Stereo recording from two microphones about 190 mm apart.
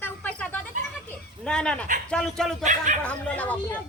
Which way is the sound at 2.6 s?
40° right (ahead or behind).